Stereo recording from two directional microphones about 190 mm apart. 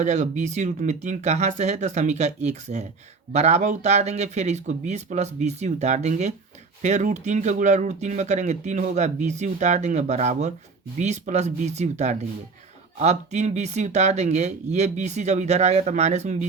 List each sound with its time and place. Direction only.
0.0 s speech: 40° right (ahead or behind)